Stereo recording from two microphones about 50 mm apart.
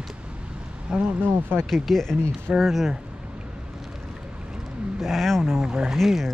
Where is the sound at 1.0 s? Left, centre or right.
Right.